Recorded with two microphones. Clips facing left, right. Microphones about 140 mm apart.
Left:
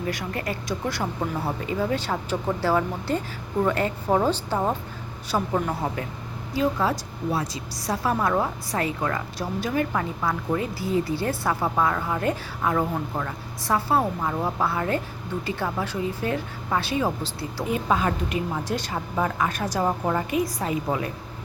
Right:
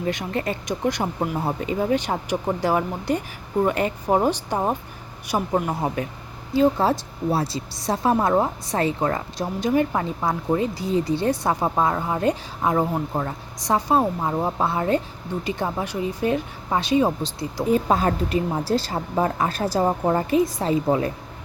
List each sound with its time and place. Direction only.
0.0 s a woman's voice: 25° right (ahead or behind)
6.5 s a woman's voice: 30° right (ahead or behind)
17.7 s a woman's voice: 35° right (ahead or behind)